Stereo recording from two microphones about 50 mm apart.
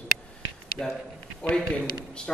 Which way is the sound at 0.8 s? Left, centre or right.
Centre.